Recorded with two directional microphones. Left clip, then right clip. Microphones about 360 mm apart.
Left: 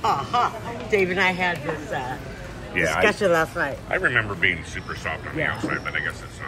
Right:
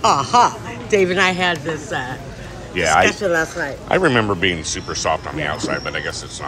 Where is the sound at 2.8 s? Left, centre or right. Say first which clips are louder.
Right 7 dB; centre.